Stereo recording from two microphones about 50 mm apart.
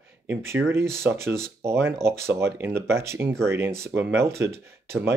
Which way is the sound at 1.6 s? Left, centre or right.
Right.